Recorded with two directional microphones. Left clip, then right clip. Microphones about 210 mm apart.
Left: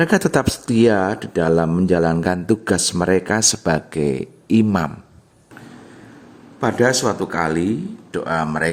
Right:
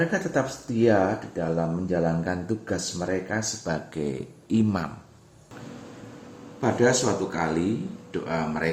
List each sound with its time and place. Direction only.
0.0 s speech: 55° left (ahead or behind)
3.6 s speech: 30° left (ahead or behind)
6.6 s speech: 50° left (ahead or behind)